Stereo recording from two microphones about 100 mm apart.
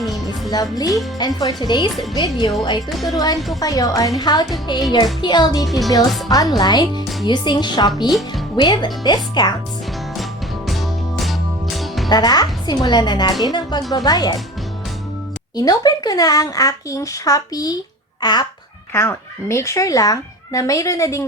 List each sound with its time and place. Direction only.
0.5 s a woman's voice: 40° left (ahead or behind)
3.6 s a woman's voice: 40° left (ahead or behind)
5.6 s speech: centre (ahead or behind)
6.2 s a woman's voice: 40° left (ahead or behind)
10.7 s music: centre (ahead or behind)
12.0 s a woman's voice: 40° left (ahead or behind)
15.5 s a child's voice: 40° left (ahead or behind)
18.9 s speech: 25° left (ahead or behind)